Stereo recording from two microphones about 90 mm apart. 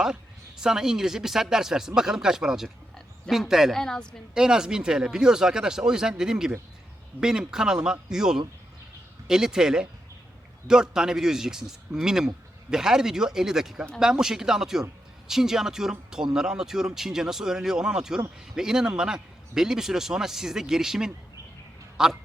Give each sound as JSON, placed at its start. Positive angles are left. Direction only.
{"t": 0.0, "sound": "a man's voice", "side_deg": -5}
{"t": 4.4, "sound": "a man's voice", "side_deg": -5}